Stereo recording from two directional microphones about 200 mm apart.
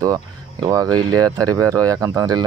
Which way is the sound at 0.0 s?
20° right (ahead or behind).